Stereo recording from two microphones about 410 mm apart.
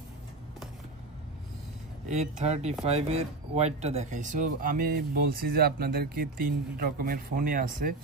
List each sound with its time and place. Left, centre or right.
2.0 s speech: centre